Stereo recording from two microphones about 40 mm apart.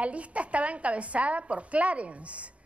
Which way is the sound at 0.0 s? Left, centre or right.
Right.